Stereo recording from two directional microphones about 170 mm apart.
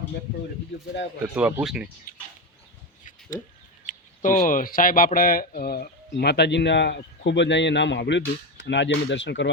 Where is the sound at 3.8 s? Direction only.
50° left (ahead or behind).